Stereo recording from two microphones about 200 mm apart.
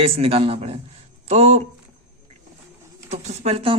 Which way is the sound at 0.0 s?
30° right (ahead or behind).